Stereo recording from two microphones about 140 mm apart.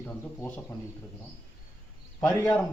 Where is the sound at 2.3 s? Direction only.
10° left (ahead or behind).